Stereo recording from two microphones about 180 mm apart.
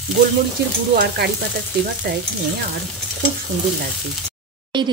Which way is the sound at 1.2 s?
60° right (ahead or behind).